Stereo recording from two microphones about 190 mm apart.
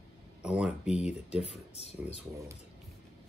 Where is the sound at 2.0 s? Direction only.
15° right (ahead or behind).